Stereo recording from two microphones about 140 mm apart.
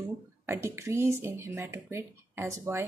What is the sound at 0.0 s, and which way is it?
Speech, 20° right (ahead or behind).